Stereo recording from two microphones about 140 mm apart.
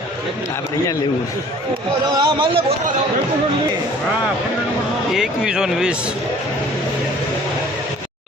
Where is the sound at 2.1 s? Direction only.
40° right (ahead or behind).